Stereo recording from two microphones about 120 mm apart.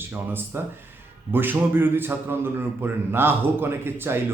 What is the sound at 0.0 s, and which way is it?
A man's voice, 20° right (ahead or behind).